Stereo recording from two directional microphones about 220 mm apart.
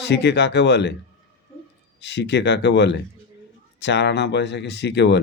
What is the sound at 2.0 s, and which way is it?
Speech, 50° left (ahead or behind).